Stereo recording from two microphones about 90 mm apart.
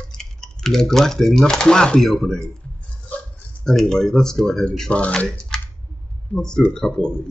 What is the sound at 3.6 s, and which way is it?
Speech, 5° left (ahead or behind).